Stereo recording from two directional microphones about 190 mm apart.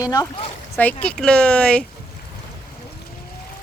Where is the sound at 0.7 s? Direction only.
10° left (ahead or behind).